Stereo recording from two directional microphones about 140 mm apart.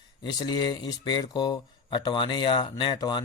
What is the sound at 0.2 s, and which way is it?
Speech, 30° left (ahead or behind).